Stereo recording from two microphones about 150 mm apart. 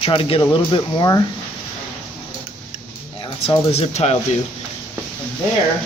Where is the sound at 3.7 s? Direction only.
45° left (ahead or behind).